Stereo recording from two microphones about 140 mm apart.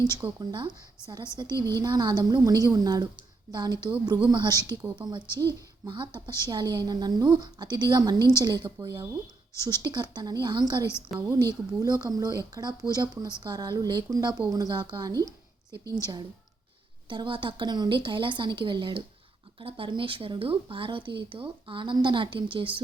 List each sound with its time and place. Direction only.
0.3 s speech: 35° right (ahead or behind)
17.1 s speech: 35° right (ahead or behind)